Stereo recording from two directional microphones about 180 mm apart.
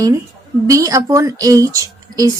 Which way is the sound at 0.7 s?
20° right (ahead or behind).